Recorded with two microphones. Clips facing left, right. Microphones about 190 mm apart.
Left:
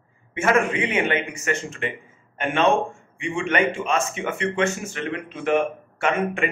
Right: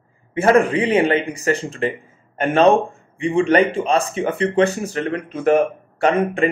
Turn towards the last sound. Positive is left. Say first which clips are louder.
# right 6 dB
turn(degrees=-35)  # may be behind; listen again after turning